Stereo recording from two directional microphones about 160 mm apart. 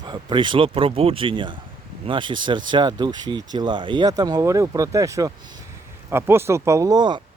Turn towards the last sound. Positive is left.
turn(degrees=-25)  # may be behind; listen again after turning